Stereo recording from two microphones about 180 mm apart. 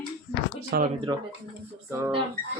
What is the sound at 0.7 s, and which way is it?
Speech, 60° right (ahead or behind).